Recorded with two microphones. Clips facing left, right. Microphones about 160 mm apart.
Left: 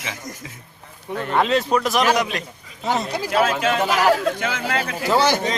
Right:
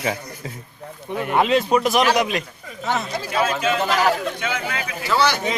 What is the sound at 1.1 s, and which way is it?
Speech, 10° right (ahead or behind).